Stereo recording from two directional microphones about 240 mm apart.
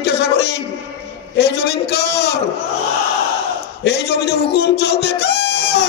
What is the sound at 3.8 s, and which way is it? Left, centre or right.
Speech, left.